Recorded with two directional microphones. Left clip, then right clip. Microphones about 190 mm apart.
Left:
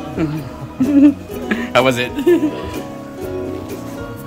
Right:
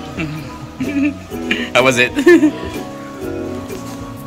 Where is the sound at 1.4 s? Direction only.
20° left (ahead or behind).